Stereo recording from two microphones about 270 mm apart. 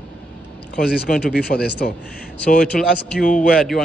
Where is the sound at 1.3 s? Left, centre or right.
Left.